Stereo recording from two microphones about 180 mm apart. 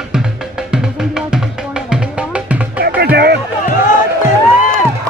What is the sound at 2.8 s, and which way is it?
Music, 65° right (ahead or behind).